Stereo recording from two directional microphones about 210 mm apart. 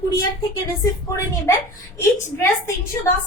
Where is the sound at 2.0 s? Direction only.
15° left (ahead or behind).